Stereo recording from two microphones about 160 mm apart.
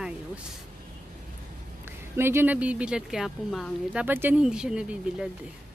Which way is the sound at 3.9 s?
10° right (ahead or behind).